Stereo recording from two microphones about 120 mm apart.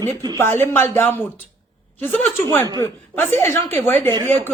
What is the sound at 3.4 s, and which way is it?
Speech, 20° left (ahead or behind).